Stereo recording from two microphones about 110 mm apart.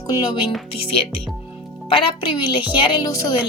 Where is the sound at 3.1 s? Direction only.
35° left (ahead or behind).